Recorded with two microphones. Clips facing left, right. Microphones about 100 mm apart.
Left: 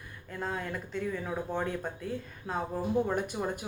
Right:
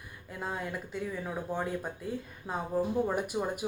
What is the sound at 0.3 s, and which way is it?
Speech, 10° right (ahead or behind).